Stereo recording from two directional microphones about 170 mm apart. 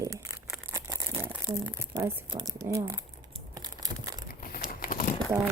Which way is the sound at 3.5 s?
25° right (ahead or behind).